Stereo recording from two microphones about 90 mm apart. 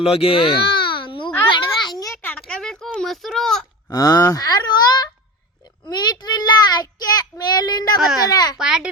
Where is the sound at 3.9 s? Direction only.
40° left (ahead or behind).